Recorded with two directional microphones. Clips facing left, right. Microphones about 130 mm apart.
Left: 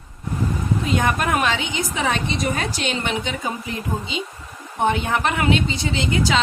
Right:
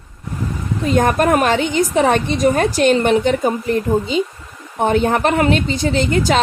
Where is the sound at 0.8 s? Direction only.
45° right (ahead or behind).